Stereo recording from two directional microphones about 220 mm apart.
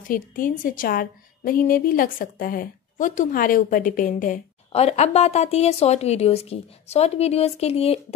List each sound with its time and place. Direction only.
0.1 s a woman's voice: 40° left (ahead or behind)